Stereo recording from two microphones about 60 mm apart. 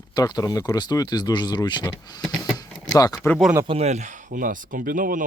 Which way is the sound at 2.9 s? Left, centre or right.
Left.